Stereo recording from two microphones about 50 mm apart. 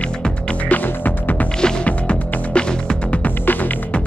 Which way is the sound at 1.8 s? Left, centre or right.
Left.